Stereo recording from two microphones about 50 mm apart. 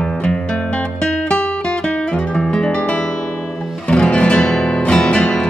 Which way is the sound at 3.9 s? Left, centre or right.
Centre.